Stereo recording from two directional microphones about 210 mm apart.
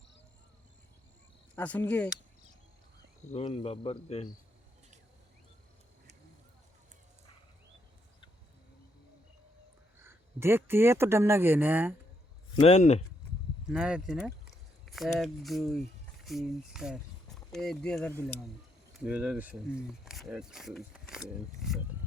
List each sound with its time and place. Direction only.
1.5 s speech: 10° left (ahead or behind)
3.3 s speech: 25° left (ahead or behind)
10.0 s speech: 10° right (ahead or behind)
12.5 s speech: 30° left (ahead or behind)
13.7 s speech: 5° right (ahead or behind)